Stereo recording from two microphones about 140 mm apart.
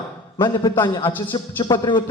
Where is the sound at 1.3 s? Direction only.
35° left (ahead or behind).